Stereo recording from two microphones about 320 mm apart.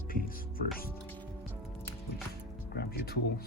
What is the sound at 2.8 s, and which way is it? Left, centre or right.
Speech, left.